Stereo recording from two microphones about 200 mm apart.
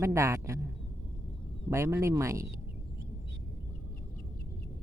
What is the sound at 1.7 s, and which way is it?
Speech, 15° right (ahead or behind).